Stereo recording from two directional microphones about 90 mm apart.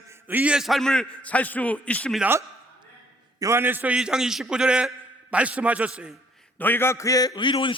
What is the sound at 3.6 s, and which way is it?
Speech, 20° right (ahead or behind).